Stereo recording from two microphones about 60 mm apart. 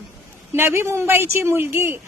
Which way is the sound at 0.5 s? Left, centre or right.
Right.